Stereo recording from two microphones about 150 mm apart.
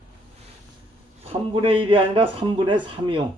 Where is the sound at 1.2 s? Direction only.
40° right (ahead or behind).